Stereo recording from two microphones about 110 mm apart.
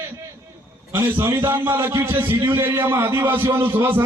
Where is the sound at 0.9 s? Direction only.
20° right (ahead or behind).